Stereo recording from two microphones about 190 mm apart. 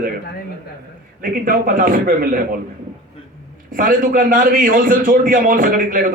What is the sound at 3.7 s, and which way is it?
A man's voice, 45° right (ahead or behind).